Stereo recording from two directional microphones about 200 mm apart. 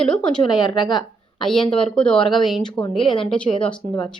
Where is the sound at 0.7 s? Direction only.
20° left (ahead or behind).